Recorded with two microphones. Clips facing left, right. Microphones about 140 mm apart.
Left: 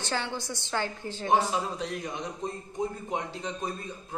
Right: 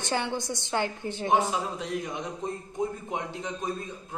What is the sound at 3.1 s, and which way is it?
Speech, 15° right (ahead or behind).